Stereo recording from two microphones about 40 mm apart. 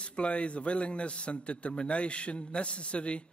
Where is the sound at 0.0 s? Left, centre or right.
Left.